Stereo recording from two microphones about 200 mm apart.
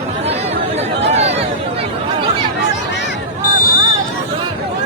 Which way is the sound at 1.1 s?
30° right (ahead or behind).